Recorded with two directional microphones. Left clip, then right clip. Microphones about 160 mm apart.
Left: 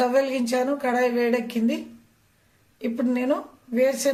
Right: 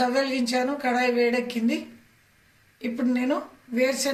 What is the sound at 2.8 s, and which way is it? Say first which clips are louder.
A woman's voice: left 1 dB; 40° left (ahead or behind).